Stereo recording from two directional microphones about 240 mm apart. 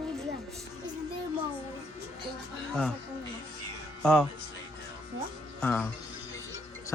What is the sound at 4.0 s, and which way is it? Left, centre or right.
Speech, centre.